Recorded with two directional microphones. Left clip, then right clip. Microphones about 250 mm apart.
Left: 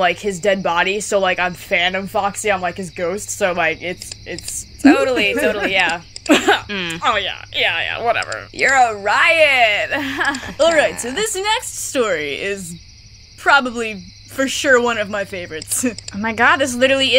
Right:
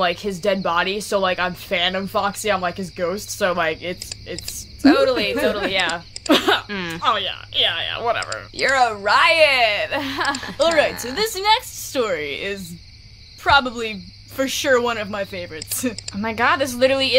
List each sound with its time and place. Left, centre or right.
0.0 s a woman's voice: centre
6.7 s speech: centre
7.0 s a woman's voice: centre